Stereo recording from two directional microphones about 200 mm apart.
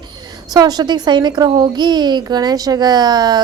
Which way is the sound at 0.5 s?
20° right (ahead or behind).